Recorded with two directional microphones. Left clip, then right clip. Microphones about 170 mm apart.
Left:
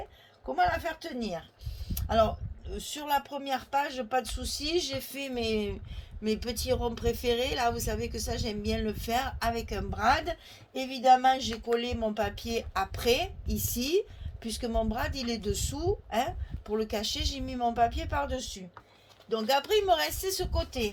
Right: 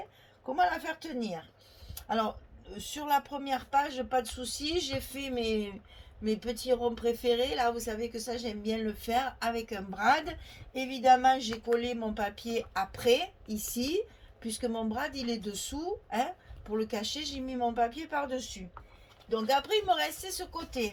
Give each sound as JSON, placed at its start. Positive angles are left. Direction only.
{"t": 0.9, "sound": "a woman's voice", "side_deg": 40}